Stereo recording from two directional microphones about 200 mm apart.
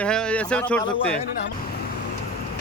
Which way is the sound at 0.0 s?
5° left (ahead or behind).